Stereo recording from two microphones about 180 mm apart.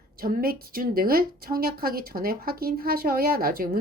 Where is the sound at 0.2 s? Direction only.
55° right (ahead or behind).